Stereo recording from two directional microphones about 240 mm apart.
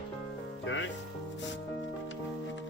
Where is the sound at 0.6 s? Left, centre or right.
Left.